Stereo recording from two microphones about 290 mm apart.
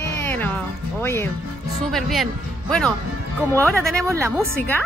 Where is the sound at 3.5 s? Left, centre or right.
Centre.